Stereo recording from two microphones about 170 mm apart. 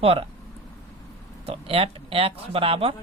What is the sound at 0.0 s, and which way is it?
Speech, 35° right (ahead or behind).